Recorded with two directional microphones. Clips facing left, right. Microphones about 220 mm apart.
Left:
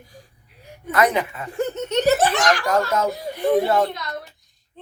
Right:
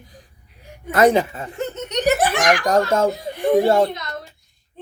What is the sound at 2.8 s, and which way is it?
Speech, 30° right (ahead or behind).